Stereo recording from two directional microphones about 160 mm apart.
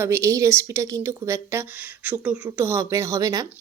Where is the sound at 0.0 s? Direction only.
15° right (ahead or behind).